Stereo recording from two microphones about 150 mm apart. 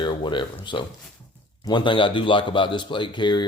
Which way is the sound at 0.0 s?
30° left (ahead or behind).